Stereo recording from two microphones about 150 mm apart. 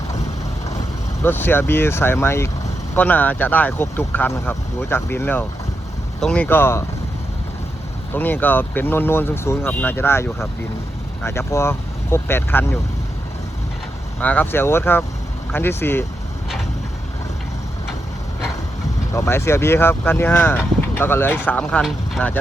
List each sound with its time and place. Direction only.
1.2 s speech: 15° left (ahead or behind)
8.1 s speech: 10° left (ahead or behind)
14.2 s speech: 10° left (ahead or behind)
19.1 s speech: 20° left (ahead or behind); by 22.2 s centre (ahead or behind)